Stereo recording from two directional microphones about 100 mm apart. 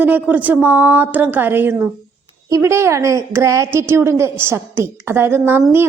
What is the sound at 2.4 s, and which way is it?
A woman's voice, 30° right (ahead or behind).